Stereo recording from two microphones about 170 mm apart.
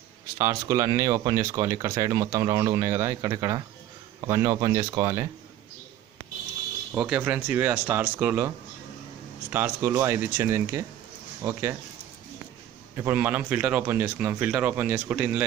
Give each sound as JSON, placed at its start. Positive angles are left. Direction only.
{"t": 0.4, "sound": "speech", "side_deg": -20}
{"t": 6.9, "sound": "speech", "side_deg": -10}
{"t": 12.9, "sound": "speech", "side_deg": -15}